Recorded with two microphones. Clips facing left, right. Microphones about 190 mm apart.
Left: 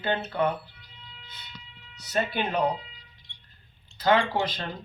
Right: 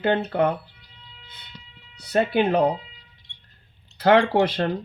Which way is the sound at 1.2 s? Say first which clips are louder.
Even; 55° right (ahead or behind).